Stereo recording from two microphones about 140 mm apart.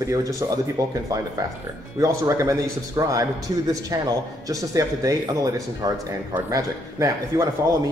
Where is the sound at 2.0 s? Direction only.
20° right (ahead or behind).